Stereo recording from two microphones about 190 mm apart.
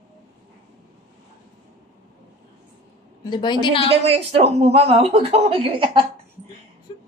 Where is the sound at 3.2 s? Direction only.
25° left (ahead or behind).